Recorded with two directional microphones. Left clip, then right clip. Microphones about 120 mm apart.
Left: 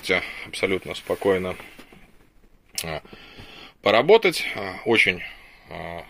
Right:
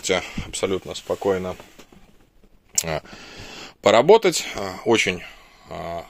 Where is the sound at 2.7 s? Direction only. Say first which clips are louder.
Right 5 dB; 50° right (ahead or behind).